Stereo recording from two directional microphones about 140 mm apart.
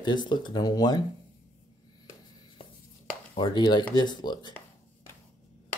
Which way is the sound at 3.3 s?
35° left (ahead or behind).